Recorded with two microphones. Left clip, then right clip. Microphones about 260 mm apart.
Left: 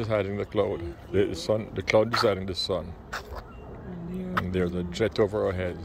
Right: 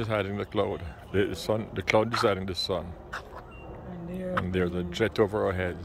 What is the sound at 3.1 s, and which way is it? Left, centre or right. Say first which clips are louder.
Vehicle: left 2 dB; left.